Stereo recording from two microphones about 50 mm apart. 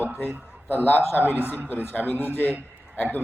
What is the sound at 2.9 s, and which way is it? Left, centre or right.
Speech, left.